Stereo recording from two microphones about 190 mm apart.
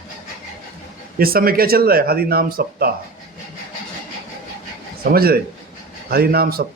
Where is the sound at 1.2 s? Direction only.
50° right (ahead or behind).